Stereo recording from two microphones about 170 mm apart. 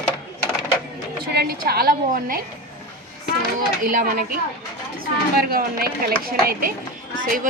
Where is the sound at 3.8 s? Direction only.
55° right (ahead or behind).